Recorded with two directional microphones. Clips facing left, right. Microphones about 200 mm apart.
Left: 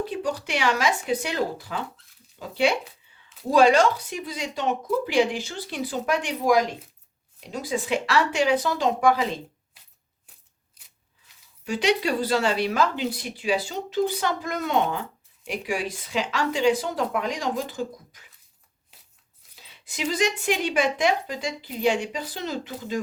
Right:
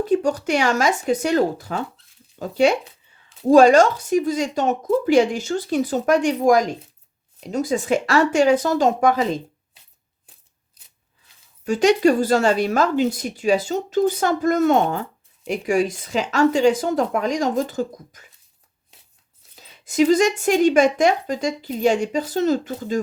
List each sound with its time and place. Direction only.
0.0 s speech: 45° right (ahead or behind)
11.6 s speech: 45° right (ahead or behind)
19.5 s speech: 45° right (ahead or behind)